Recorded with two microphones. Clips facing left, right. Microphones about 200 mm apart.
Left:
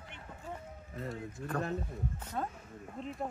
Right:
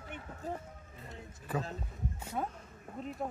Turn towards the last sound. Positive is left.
turn(degrees=0)  # may be behind; listen again after turning